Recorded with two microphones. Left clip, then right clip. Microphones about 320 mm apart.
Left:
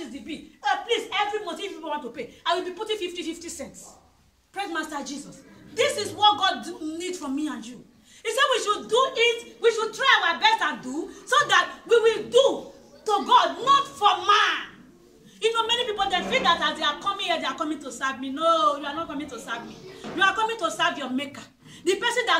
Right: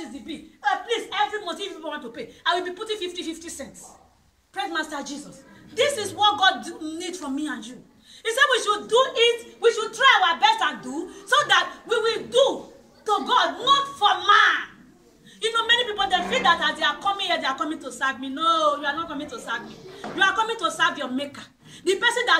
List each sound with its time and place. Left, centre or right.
0.6 s chuckle: centre
4.6 s speech: centre